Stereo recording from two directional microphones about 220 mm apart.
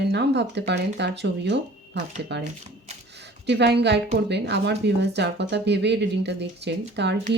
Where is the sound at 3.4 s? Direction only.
50° right (ahead or behind).